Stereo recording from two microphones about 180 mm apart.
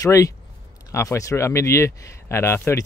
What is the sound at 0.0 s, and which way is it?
Speech, 20° left (ahead or behind).